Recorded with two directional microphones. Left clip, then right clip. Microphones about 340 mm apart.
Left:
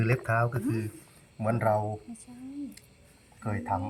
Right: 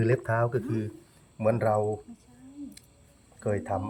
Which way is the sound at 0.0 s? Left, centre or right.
Centre.